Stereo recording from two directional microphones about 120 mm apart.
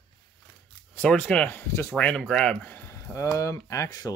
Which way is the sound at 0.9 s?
10° left (ahead or behind).